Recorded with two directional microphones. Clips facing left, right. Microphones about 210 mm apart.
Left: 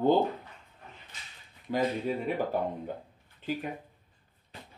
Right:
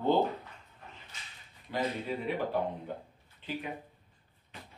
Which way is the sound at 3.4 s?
45° left (ahead or behind).